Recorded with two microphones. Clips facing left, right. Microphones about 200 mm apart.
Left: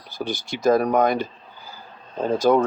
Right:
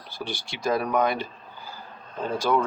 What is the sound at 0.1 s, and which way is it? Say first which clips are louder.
Speech: left 6 dB; 45° left (ahead or behind).